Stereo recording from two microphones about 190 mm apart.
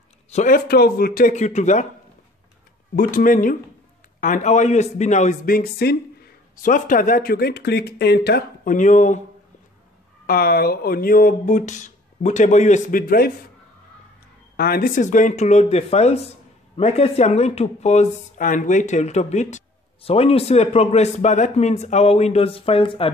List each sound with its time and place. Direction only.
0.3 s speech: 40° left (ahead or behind)
0.7 s a man's voice: 55° left (ahead or behind); by 1.9 s 40° left (ahead or behind)
3.0 s a man's voice: 45° left (ahead or behind)
10.2 s a man's voice: 50° left (ahead or behind)
14.6 s speech: 50° left (ahead or behind); by 23.1 s 30° left (ahead or behind)